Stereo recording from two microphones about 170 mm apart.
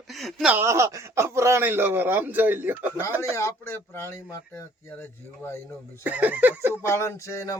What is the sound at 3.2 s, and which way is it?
Speech, 15° left (ahead or behind).